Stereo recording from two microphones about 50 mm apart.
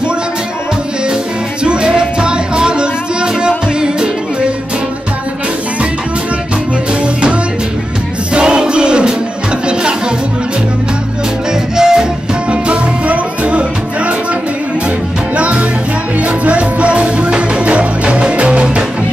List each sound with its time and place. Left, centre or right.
1.6 s music: centre
8.3 s music: centre
11.7 s music: centre
15.3 s music: right